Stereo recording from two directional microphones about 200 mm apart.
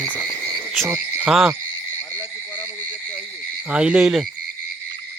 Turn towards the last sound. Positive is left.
turn(degrees=-5)  # may be behind; listen again after turning